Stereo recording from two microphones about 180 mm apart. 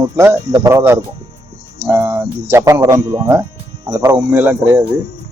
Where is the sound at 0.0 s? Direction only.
15° right (ahead or behind).